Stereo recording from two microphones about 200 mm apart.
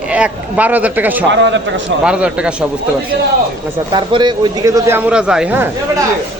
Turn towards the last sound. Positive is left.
turn(degrees=-5)  # may be behind; listen again after turning